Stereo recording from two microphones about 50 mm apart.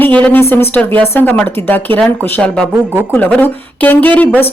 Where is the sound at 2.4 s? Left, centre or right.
Left.